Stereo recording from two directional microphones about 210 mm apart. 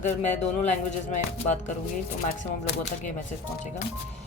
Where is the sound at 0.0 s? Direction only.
35° left (ahead or behind).